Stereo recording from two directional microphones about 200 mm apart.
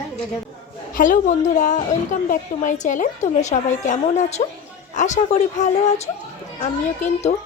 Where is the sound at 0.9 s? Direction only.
40° left (ahead or behind).